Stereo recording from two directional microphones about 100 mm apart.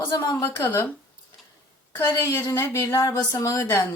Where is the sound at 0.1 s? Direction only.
45° left (ahead or behind).